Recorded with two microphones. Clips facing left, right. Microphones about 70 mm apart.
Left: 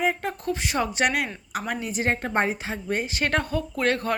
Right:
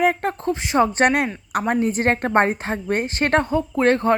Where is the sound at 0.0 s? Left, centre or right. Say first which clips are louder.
Right 6 dB; right.